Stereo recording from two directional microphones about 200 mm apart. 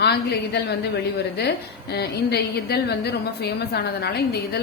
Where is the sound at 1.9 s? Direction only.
55° left (ahead or behind).